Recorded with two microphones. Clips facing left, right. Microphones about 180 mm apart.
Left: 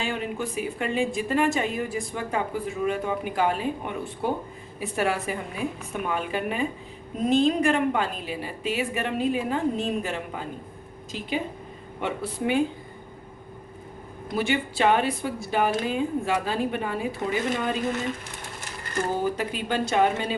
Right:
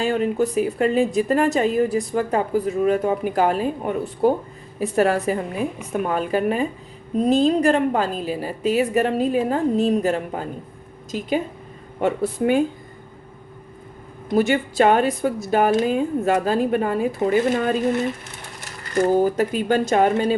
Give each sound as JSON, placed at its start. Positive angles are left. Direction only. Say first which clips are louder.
{"t": 0.0, "sound": "a woman's voice", "louder": "right 9 dB", "side_deg": -40}
{"t": 11.9, "sound": "a woman's voice", "louder": "right 8 dB", "side_deg": -45}
{"t": 14.3, "sound": "a woman's voice", "louder": "right 8 dB", "side_deg": -45}
{"t": 19.1, "sound": "a woman's voice", "louder": "right 8 dB", "side_deg": -45}